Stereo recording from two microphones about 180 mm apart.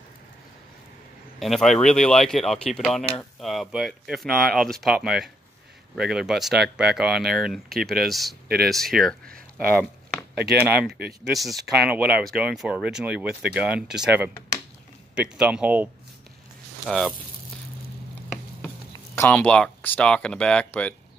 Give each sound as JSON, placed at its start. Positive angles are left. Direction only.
{"t": 1.4, "sound": "speech", "side_deg": 0}
{"t": 9.3, "sound": "a sound", "side_deg": -55}
{"t": 10.3, "sound": "speech", "side_deg": -65}
{"t": 11.3, "sound": "speech", "side_deg": 0}
{"t": 19.1, "sound": "speech", "side_deg": 10}